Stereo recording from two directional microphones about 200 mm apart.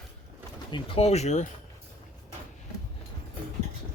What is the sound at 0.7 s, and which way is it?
Speech, 30° left (ahead or behind).